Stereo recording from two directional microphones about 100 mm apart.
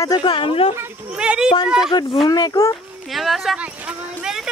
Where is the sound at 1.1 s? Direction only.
10° right (ahead or behind).